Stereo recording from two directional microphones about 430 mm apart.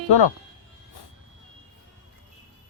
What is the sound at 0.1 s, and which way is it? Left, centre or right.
Speech, left.